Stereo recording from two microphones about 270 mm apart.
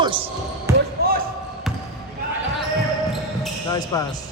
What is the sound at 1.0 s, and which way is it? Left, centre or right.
Basketball bounce, right.